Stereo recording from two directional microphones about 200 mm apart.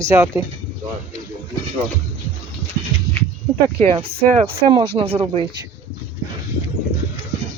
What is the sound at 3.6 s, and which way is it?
Speech, 25° right (ahead or behind).